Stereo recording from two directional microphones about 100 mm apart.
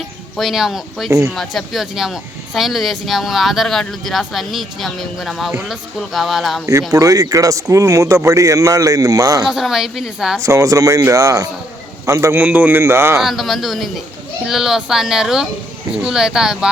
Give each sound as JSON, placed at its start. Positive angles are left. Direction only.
{"t": 0.3, "sound": "speech", "side_deg": 0}
{"t": 6.7, "sound": "speech", "side_deg": -30}
{"t": 9.5, "sound": "speech", "side_deg": -5}
{"t": 10.4, "sound": "speech", "side_deg": -35}
{"t": 12.4, "sound": "speech", "side_deg": -15}
{"t": 13.1, "sound": "speech", "side_deg": 0}